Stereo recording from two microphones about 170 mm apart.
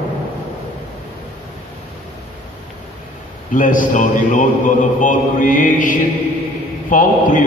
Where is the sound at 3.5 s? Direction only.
50° left (ahead or behind).